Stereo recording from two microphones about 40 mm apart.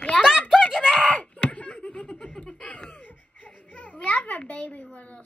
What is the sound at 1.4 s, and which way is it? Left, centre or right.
Laughter, left.